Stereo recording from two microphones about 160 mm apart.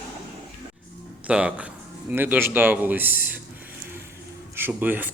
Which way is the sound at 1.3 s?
5° right (ahead or behind).